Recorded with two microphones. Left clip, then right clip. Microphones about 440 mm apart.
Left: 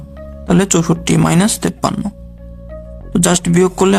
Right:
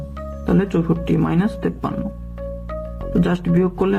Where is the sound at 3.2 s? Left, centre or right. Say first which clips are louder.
Left 7 dB; left.